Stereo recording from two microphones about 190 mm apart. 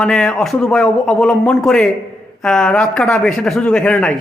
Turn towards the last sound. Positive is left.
turn(degrees=5)  # may be behind; listen again after turning